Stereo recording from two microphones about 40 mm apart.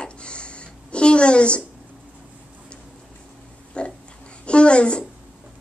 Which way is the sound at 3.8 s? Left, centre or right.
Left.